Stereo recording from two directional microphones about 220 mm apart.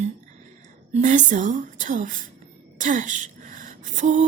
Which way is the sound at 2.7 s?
35° right (ahead or behind).